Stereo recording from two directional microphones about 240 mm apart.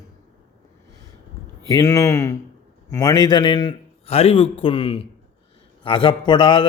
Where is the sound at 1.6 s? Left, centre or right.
Centre.